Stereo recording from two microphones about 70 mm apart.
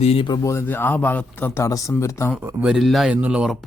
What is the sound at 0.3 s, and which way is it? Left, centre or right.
Speech, left.